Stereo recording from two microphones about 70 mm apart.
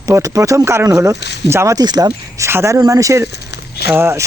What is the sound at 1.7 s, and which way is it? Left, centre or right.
Speech, right.